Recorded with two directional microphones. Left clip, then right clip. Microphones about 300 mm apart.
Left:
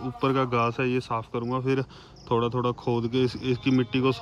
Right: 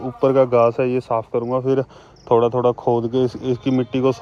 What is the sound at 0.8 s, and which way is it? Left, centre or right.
Speech, left.